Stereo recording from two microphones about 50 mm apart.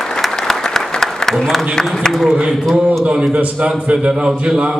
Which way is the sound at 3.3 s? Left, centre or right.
Right.